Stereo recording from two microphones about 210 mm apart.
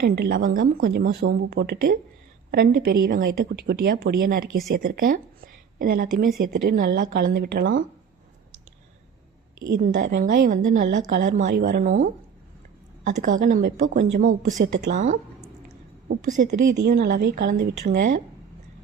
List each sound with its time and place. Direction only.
0.0 s a woman's voice: 45° right (ahead or behind)
9.8 s a woman's voice: 35° right (ahead or behind)
10.1 s a woman's voice: 50° right (ahead or behind)
13.2 s a woman's voice: 40° right (ahead or behind)
16.2 s a woman's voice: 40° right (ahead or behind)
16.8 s a woman's voice: 50° right (ahead or behind)